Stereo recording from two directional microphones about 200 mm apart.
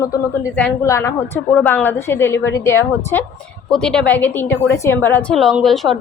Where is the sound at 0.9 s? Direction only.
15° left (ahead or behind).